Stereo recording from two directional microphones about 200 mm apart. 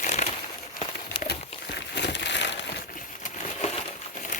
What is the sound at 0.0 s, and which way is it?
Crumpling, 35° left (ahead or behind).